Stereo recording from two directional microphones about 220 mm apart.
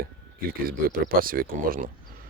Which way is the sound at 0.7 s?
40° right (ahead or behind).